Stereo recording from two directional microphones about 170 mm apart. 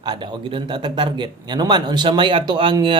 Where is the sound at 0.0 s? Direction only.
25° right (ahead or behind).